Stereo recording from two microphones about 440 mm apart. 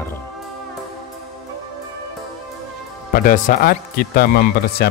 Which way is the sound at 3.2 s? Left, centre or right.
Centre.